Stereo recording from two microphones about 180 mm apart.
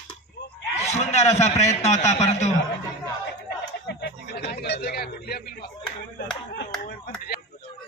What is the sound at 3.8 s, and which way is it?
A man's voice, 75° left (ahead or behind).